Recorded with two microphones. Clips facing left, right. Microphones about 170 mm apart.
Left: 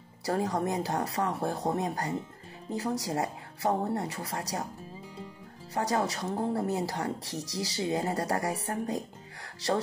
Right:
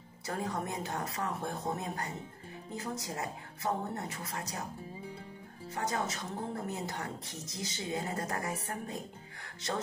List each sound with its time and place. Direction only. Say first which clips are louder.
0.2 s speech: left 7 dB; 35° left (ahead or behind)
5.8 s speech: left 6 dB; 35° left (ahead or behind)